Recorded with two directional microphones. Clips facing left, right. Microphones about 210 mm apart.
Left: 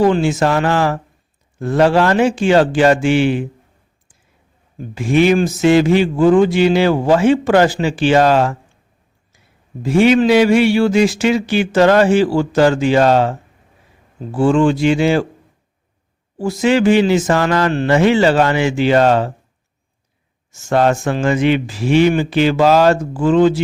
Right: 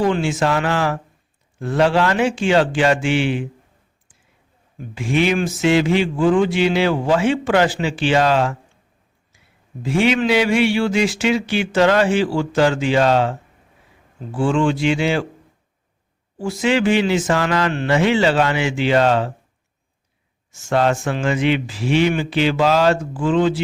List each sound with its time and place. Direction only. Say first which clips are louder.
0.0 s a man's voice: left 5 dB; 40° left (ahead or behind)
4.8 s a man's voice: left 5 dB; 40° left (ahead or behind)
9.8 s a man's voice: left 6 dB; 40° left (ahead or behind)
14.3 s a man's voice: left 5 dB; 40° left (ahead or behind)
16.4 s a man's voice: left 4 dB; 40° left (ahead or behind)
20.5 s speech: left 3 dB; 40° left (ahead or behind)